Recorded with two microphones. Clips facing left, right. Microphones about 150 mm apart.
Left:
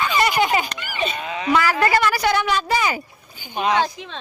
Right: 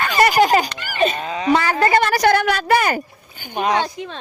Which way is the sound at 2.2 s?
60° right (ahead or behind).